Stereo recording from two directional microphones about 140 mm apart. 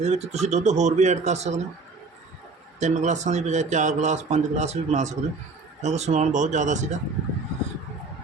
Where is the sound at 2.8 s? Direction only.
60° right (ahead or behind).